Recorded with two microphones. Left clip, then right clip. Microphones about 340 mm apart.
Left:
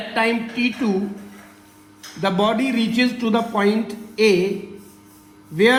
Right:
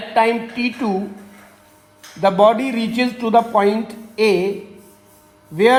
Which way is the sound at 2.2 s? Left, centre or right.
Right.